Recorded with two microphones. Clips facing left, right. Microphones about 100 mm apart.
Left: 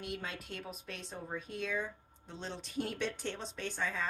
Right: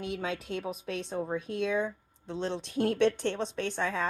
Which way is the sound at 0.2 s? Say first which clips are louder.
Right 9 dB; 90° right.